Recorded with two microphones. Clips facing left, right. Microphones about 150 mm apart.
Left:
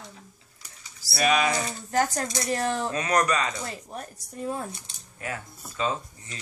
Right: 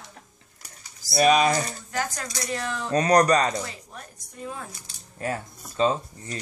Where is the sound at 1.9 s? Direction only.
40° left (ahead or behind).